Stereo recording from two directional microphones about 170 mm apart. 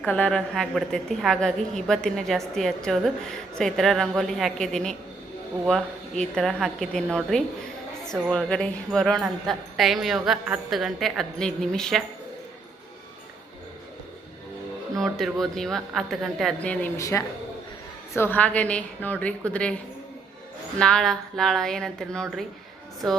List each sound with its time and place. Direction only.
0.0 s a woman's voice: 10° left (ahead or behind)
14.9 s a woman's voice: centre (ahead or behind)
17.0 s a woman's voice: 20° left (ahead or behind)
20.7 s a woman's voice: 5° left (ahead or behind)